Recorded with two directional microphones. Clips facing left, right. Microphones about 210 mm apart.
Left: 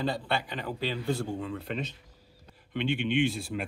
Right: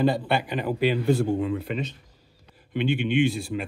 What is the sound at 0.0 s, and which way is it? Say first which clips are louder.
A man's voice: right 8 dB; 15° right (ahead or behind).